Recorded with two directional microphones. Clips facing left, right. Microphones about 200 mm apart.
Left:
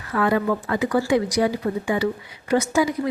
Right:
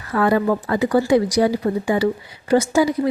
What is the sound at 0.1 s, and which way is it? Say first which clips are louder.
Speech: right 3 dB; 35° right (ahead or behind).